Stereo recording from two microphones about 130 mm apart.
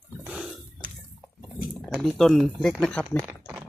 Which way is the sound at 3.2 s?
20° right (ahead or behind).